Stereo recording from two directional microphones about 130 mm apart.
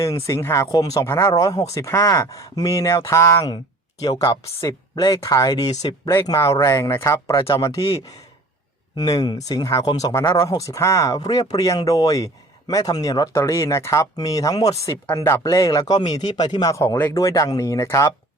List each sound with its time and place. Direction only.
0.3 s speech: 20° left (ahead or behind)
5.8 s speech: 40° left (ahead or behind); by 7.2 s 20° left (ahead or behind)
7.3 s speech: 35° left (ahead or behind)
9.0 s speech: 30° left (ahead or behind)